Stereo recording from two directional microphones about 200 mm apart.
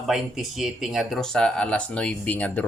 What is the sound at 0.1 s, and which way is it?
Speech, centre (ahead or behind).